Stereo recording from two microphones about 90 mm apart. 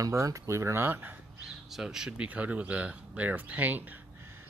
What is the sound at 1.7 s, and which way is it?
Speech, 5° right (ahead or behind).